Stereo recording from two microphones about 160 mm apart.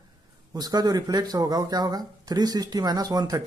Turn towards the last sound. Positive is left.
turn(degrees=-25)  # may be behind; listen again after turning